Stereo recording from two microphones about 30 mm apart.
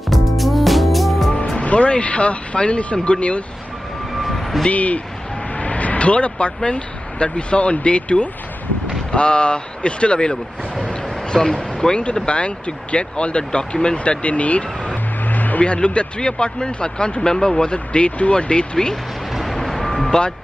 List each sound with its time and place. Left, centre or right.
0.1 s music: centre
1.6 s speech: left
4.2 s a sound: centre
4.6 s speech: left
11.3 s speech: centre
11.9 s speech: left
13.9 s speech: left
15.2 s vehicle: left
15.6 s speech: left
17.6 s speech: left
19.4 s vehicle: centre
20.1 s speech: left